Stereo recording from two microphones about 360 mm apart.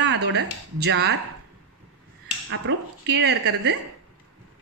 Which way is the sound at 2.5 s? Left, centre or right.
Right.